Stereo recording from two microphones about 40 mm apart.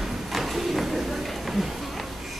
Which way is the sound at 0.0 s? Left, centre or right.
Centre.